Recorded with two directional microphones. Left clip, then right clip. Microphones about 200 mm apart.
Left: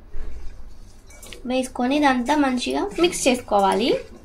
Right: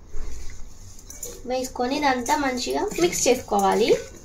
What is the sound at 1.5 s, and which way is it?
Speech, 25° left (ahead or behind).